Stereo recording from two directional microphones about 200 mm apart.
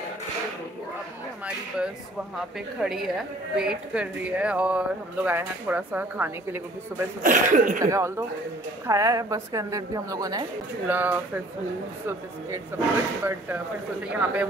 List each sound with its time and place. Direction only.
2.8 s a woman's voice: centre (ahead or behind)
7.2 s speech: 40° right (ahead or behind)
7.8 s speech: 15° right (ahead or behind)
12.7 s speech: 10° right (ahead or behind)